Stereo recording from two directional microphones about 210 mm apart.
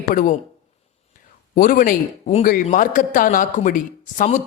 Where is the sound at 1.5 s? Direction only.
40° left (ahead or behind).